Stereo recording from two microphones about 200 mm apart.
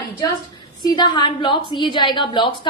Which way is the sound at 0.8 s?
20° left (ahead or behind).